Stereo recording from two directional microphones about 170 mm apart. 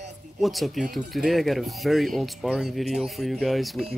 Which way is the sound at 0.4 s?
Centre (ahead or behind).